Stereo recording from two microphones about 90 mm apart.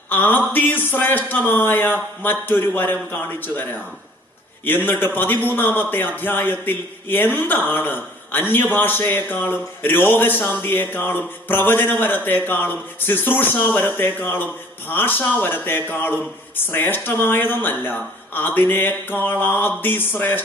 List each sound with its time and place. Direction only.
0.1 s a man's voice: 20° left (ahead or behind)